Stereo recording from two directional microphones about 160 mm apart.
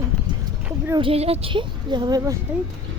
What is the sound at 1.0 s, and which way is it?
Speech, 35° right (ahead or behind).